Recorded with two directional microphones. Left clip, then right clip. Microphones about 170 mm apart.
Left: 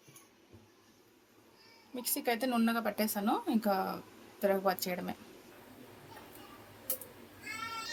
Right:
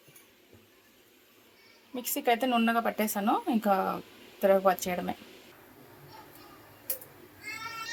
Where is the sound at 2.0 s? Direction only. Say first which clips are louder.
Right 6 dB; 25° right (ahead or behind).